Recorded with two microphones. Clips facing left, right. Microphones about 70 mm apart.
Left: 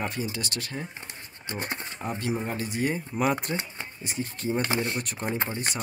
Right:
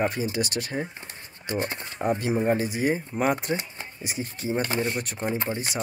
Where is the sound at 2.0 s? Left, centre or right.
Right; by 5.3 s centre.